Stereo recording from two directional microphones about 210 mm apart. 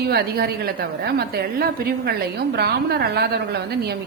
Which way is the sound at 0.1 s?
45° right (ahead or behind).